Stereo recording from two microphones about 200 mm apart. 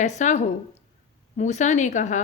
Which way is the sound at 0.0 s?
35° left (ahead or behind).